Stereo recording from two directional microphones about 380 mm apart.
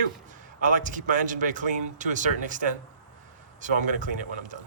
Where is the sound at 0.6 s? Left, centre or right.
Centre.